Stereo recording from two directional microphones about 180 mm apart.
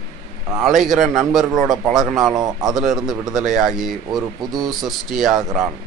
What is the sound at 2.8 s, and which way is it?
A man's voice, centre (ahead or behind).